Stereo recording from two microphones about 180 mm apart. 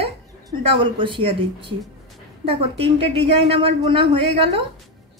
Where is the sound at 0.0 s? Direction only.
30° right (ahead or behind).